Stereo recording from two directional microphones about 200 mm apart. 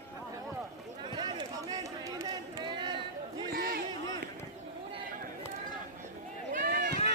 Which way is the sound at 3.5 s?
50° right (ahead or behind).